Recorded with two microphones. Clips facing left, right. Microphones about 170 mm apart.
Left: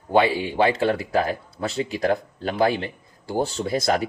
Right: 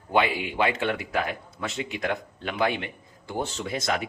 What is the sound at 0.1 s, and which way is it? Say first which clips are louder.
Speech: left 5 dB; 30° left (ahead or behind).